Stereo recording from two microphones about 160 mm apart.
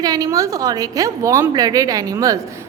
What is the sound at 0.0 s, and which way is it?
A woman's voice, 25° right (ahead or behind).